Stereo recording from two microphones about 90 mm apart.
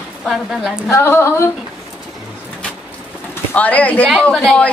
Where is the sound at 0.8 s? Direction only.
30° left (ahead or behind).